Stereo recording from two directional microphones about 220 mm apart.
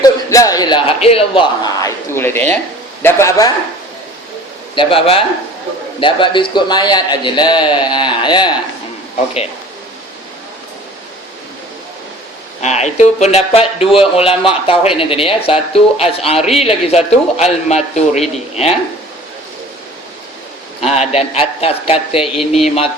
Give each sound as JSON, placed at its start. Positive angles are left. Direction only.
{"t": 0.0, "sound": "a sound", "side_deg": 15}
{"t": 3.0, "sound": "speech", "side_deg": 10}
{"t": 4.7, "sound": "speech", "side_deg": 25}
{"t": 12.6, "sound": "speech", "side_deg": 30}
{"t": 20.8, "sound": "speech", "side_deg": 30}